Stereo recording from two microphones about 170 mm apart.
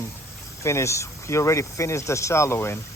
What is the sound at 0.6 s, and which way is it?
Speech, 15° left (ahead or behind).